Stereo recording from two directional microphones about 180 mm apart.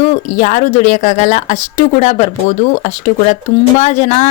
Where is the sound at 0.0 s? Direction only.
40° left (ahead or behind).